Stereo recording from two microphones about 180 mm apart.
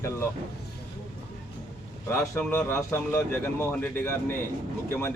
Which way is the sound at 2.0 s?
15° left (ahead or behind).